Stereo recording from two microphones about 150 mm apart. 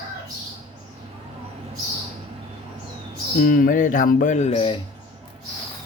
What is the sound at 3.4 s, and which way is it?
Speech, 65° left (ahead or behind).